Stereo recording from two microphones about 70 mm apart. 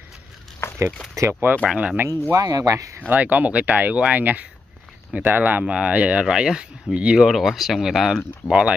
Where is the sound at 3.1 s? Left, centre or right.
Right.